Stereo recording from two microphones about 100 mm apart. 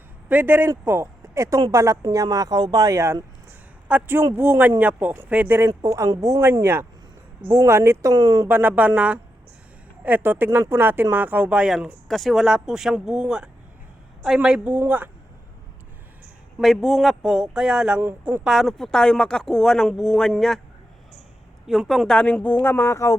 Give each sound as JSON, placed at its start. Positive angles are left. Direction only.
{"t": 0.3, "sound": "speech", "side_deg": -20}
{"t": 3.8, "sound": "speech", "side_deg": -20}
{"t": 8.1, "sound": "speech", "side_deg": -40}
{"t": 8.4, "sound": "speech", "side_deg": -20}
{"t": 16.6, "sound": "speech", "side_deg": 0}
{"t": 18.0, "sound": "speech", "side_deg": -20}
{"t": 18.4, "sound": "speech", "side_deg": 0}
{"t": 21.7, "sound": "a woman's voice", "side_deg": 0}
{"t": 22.6, "sound": "speech", "side_deg": 25}